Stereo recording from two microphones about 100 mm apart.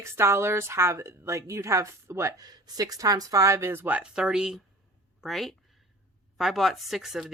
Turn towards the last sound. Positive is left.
turn(degrees=-5)  # may be behind; listen again after turning